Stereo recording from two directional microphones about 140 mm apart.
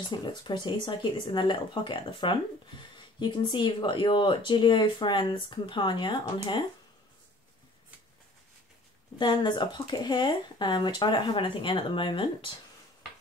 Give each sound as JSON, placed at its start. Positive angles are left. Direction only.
{"t": 0.1, "sound": "speech", "side_deg": 30}
{"t": 9.2, "sound": "speech", "side_deg": 35}